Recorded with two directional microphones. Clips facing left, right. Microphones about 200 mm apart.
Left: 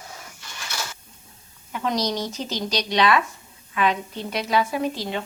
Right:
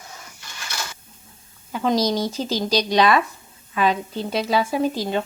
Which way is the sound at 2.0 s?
35° right (ahead or behind).